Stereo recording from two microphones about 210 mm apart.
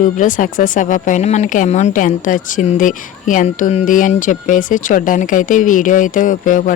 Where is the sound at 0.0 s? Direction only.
40° left (ahead or behind).